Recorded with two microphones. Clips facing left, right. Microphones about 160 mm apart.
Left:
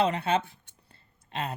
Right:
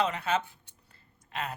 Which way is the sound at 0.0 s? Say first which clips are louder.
Left 3 dB; 30° left (ahead or behind).